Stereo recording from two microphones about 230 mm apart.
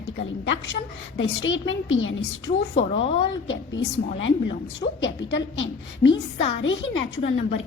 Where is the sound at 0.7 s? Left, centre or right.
Left.